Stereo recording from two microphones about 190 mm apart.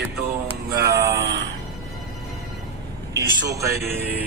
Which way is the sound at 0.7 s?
15° right (ahead or behind).